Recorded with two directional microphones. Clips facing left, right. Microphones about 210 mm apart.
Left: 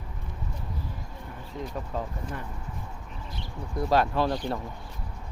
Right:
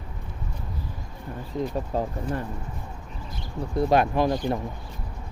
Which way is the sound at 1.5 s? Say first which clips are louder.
Right 7 dB; 35° right (ahead or behind).